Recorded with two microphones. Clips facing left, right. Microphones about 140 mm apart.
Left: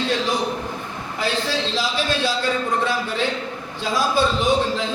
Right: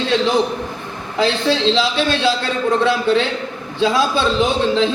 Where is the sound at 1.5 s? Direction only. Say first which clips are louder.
Right 6 dB; 90° right.